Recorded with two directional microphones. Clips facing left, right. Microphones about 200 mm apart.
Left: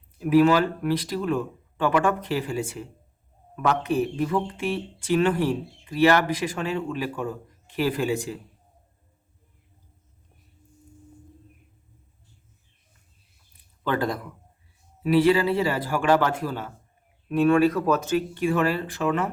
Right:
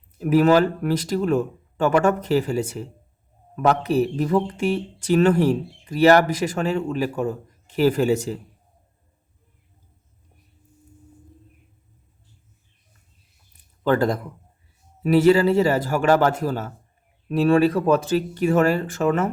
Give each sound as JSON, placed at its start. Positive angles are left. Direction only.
{"t": 0.2, "sound": "speech", "side_deg": -45}
{"t": 13.8, "sound": "speech", "side_deg": -45}